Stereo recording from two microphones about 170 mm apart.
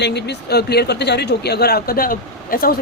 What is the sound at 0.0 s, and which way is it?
Speech, 80° left.